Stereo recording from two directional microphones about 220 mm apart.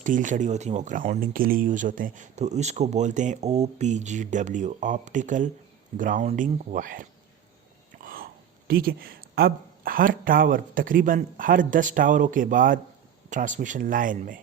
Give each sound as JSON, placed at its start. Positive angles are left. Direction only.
{"t": 0.0, "sound": "speech", "side_deg": -35}